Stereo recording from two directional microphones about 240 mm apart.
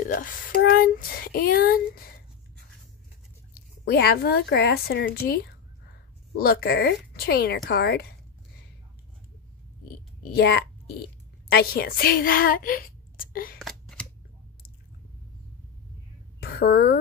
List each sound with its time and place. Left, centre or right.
0.1 s speech: left
3.8 s speech: left
10.3 s a child's voice: left
13.6 s scissors: centre
16.3 s a sound: left